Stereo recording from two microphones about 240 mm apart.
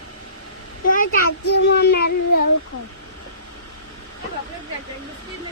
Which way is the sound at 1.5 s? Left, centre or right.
Left.